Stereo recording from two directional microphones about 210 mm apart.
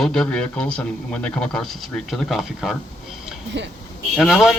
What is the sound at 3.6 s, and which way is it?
Speech, 55° right (ahead or behind).